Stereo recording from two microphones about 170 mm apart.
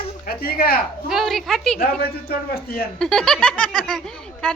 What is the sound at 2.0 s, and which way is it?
Speech, 65° left (ahead or behind).